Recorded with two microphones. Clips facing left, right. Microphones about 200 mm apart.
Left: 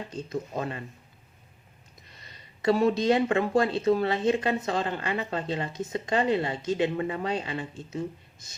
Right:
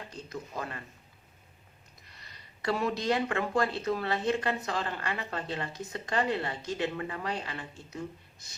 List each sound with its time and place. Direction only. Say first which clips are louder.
0.3 s speech: left 6 dB; 25° left (ahead or behind)
2.6 s speech: left 8 dB; 25° left (ahead or behind)